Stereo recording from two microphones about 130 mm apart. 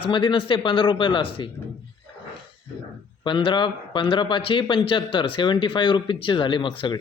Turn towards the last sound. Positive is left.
turn(degrees=40)  # may be behind; listen again after turning